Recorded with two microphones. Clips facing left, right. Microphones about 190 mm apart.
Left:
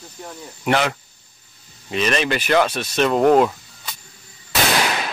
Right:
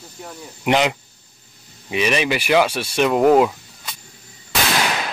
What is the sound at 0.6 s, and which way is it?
Speech, 15° right (ahead or behind).